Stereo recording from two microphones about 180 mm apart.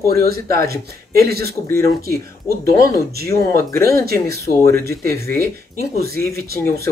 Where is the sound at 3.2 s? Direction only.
60° right (ahead or behind).